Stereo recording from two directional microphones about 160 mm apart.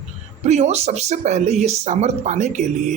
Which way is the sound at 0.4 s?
45° right (ahead or behind).